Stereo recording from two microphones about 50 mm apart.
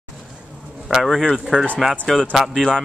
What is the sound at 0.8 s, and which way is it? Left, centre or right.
Speech, centre.